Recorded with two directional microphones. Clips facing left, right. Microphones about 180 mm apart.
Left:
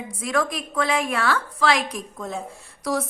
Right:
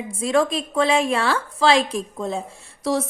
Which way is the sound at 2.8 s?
25° right (ahead or behind).